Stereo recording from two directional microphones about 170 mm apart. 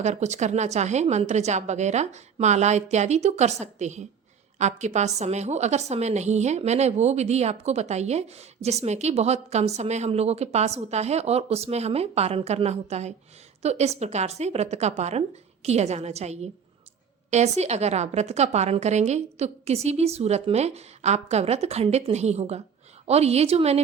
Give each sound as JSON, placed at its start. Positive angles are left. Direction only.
{"t": 0.0, "sound": "a woman's voice", "side_deg": -40}